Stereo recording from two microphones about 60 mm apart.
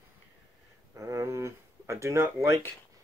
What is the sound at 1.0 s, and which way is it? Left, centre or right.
Speech, right.